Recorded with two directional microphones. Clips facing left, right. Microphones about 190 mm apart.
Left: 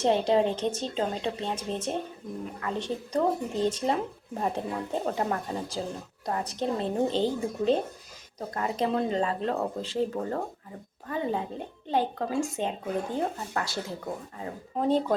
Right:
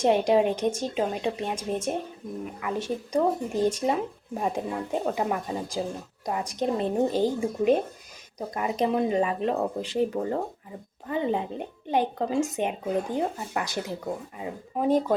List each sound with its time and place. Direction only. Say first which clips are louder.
0.0 s speech: right 2 dB; 15° right (ahead or behind)